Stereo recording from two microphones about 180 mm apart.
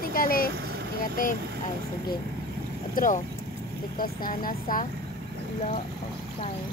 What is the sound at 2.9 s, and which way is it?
Speech, 45° left (ahead or behind).